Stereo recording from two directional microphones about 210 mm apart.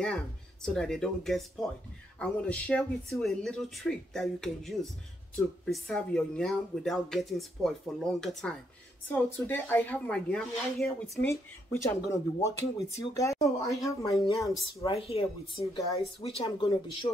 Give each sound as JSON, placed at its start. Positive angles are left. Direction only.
{"t": 0.0, "sound": "speech", "side_deg": 5}